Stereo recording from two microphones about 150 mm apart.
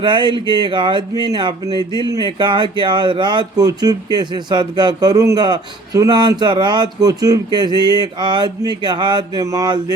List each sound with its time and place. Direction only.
0.0 s speech: 30° right (ahead or behind)